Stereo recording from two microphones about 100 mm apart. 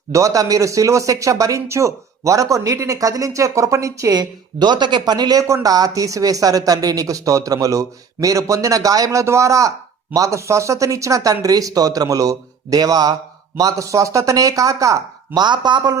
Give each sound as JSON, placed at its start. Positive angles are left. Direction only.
{"t": 0.1, "sound": "speech", "side_deg": -35}
{"t": 15.4, "sound": "a man's voice", "side_deg": -50}